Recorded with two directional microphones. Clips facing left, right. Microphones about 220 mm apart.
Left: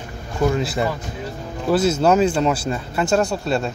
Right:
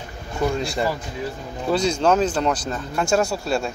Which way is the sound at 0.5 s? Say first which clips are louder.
Left 1 dB; 5° left (ahead or behind).